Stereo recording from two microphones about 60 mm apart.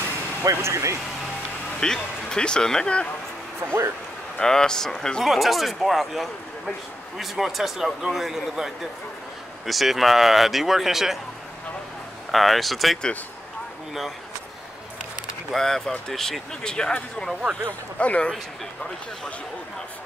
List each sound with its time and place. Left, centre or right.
0.4 s speech: right
1.8 s speech: centre
4.4 s speech: centre
12.3 s speech: centre
15.5 s speech: centre